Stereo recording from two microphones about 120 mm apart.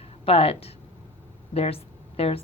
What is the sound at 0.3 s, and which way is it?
A woman's voice, 55° left (ahead or behind).